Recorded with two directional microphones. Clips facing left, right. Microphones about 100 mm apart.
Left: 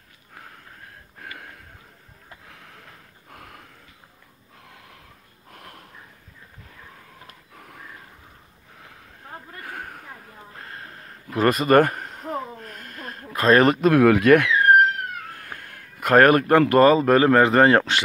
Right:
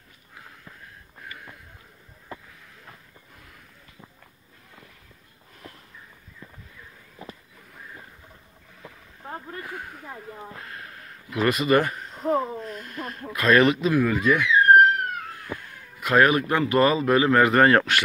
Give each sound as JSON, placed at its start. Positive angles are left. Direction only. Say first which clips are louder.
{"t": 3.3, "sound": "a sound", "louder": "left 10 dB", "side_deg": 60}
{"t": 5.5, "sound": "sniff", "louder": "left 2 dB", "side_deg": 60}
{"t": 9.7, "sound": "speech", "louder": "left 1 dB", "side_deg": 50}
{"t": 10.6, "sound": "a sound", "louder": "left 1 dB", "side_deg": 35}
{"t": 12.6, "sound": "speech", "louder": "right 3 dB", "side_deg": 50}
{"t": 14.0, "sound": "speech", "louder": "left 7 dB", "side_deg": 70}